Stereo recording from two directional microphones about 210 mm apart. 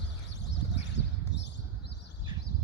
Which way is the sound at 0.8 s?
55° left (ahead or behind).